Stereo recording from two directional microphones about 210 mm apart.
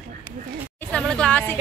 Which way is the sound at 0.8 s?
5° left (ahead or behind).